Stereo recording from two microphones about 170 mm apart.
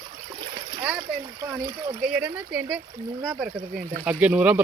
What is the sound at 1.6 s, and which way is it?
Speech, 25° right (ahead or behind).